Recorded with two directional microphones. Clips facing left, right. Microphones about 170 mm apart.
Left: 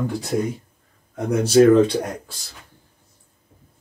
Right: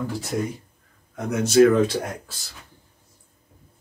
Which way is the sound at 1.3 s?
35° left (ahead or behind).